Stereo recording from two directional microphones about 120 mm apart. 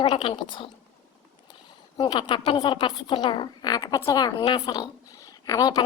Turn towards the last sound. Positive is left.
turn(degrees=30)  # may be behind; listen again after turning